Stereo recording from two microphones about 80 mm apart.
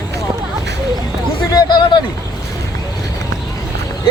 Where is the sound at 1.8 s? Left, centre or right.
Left.